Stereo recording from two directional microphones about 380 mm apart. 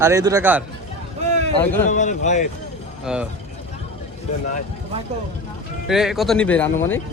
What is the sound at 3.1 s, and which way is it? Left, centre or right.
Speech, centre.